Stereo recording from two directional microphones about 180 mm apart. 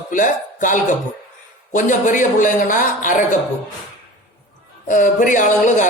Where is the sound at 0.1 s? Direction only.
45° left (ahead or behind).